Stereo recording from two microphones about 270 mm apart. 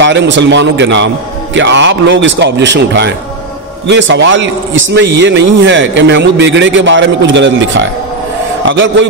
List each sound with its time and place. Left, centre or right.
0.0 s a man's voice: right